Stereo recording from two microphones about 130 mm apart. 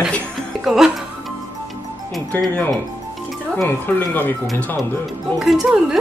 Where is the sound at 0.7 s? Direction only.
5° right (ahead or behind).